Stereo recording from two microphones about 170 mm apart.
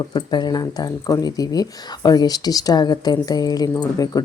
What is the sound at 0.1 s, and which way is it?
Speech, 25° left (ahead or behind).